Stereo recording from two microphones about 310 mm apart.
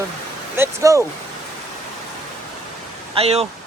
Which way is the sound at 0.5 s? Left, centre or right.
Centre.